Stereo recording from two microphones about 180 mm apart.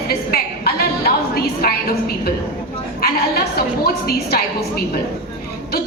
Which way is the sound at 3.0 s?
60° left (ahead or behind).